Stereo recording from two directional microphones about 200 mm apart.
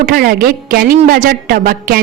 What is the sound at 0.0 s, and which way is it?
A woman's voice, 50° right (ahead or behind).